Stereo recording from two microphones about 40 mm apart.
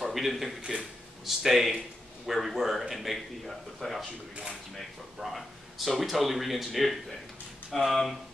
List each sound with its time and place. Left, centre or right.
0.0 s a sound: centre
0.3 s speech: centre
0.6 s speech: right
1.2 s speech: centre
5.2 s speech: centre